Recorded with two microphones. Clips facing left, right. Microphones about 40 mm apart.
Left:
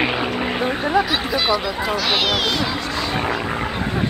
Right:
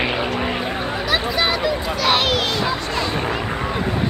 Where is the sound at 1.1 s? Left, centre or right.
Right.